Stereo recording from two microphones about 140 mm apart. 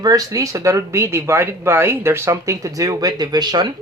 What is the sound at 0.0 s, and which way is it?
Speech, 25° right (ahead or behind).